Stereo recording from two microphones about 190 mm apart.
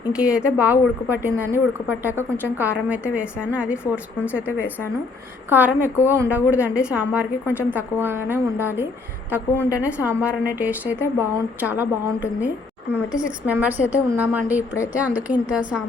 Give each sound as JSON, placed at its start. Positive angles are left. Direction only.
{"t": 0.1, "sound": "a woman's voice", "side_deg": -5}
{"t": 9.6, "sound": "a woman's voice", "side_deg": 15}
{"t": 10.1, "sound": "a woman's voice", "side_deg": -10}